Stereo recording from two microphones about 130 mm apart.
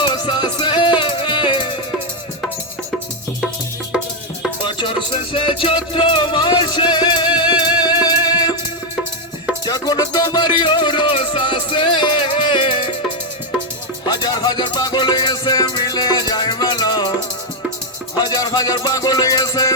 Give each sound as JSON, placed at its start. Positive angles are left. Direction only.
{"t": 0.0, "sound": "music", "side_deg": 35}
{"t": 4.6, "sound": "music", "side_deg": 40}
{"t": 9.6, "sound": "music", "side_deg": 30}
{"t": 14.0, "sound": "music", "side_deg": 35}
{"t": 18.2, "sound": "music", "side_deg": 30}